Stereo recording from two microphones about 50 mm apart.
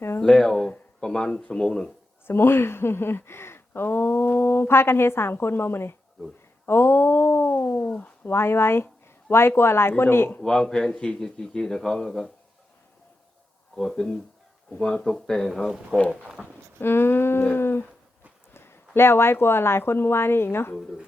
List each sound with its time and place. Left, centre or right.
0.2 s speech: centre
2.2 s speech: left
6.7 s a sound: left
7.8 s a sound: left
8.3 s speech: left
10.4 s speech: centre
13.7 s speech: centre
15.0 s speech: centre
16.8 s speech: left
18.5 s speech: left